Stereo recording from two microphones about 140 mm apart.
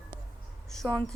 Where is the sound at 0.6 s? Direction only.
5° left (ahead or behind).